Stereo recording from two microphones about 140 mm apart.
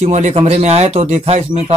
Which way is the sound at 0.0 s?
55° right (ahead or behind).